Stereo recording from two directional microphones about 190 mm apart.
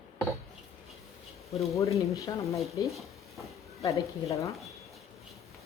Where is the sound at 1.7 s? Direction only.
15° left (ahead or behind).